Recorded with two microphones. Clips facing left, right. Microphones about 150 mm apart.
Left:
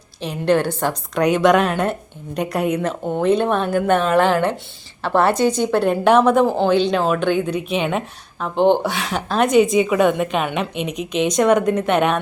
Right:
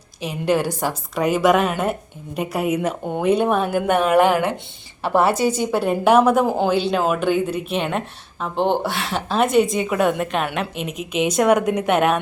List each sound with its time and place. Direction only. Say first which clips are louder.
0.2 s a woman's voice: left 2 dB; 10° right (ahead or behind)